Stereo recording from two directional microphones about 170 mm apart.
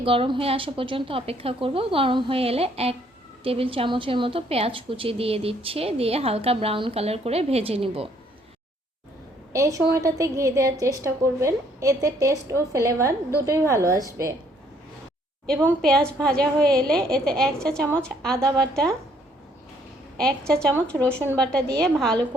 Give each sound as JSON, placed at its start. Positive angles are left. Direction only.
{"t": 0.0, "sound": "a woman's voice", "side_deg": -30}
{"t": 9.5, "sound": "a woman's voice", "side_deg": -20}
{"t": 15.8, "sound": "a woman's voice", "side_deg": 5}
{"t": 20.1, "sound": "a woman's voice", "side_deg": 5}